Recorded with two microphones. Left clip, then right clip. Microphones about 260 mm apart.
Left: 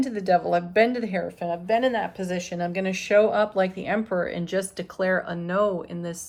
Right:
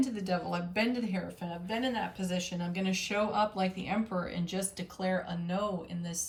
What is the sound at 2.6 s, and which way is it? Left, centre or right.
Speech, left.